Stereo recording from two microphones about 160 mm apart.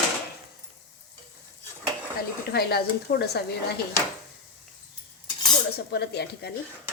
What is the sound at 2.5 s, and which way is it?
Speech, 80° left.